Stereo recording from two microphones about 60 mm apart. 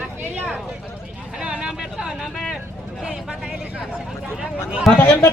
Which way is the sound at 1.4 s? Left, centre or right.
Centre.